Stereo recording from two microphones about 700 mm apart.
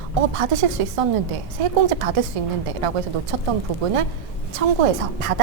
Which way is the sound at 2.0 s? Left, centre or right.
Right.